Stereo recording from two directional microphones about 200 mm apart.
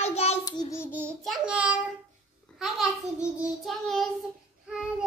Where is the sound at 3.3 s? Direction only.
Centre (ahead or behind).